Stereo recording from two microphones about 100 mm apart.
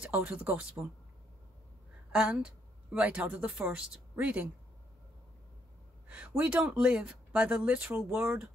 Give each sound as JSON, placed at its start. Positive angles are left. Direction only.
{"t": 0.0, "sound": "a woman's voice", "side_deg": -15}
{"t": 2.1, "sound": "a woman's voice", "side_deg": -10}
{"t": 6.0, "sound": "a woman's voice", "side_deg": -15}